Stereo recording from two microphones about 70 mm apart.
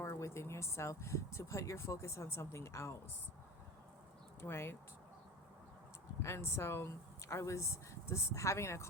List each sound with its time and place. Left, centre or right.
0.0 s speech: left
4.4 s speech: left
6.2 s speech: left